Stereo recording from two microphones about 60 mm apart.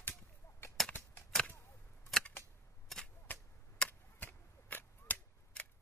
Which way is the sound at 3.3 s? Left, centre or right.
Left.